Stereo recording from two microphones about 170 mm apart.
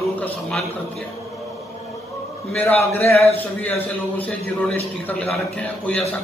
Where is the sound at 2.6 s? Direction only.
10° left (ahead or behind).